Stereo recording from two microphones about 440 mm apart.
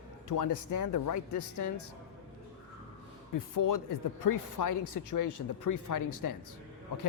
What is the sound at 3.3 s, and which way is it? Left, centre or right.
A woman's voice, left.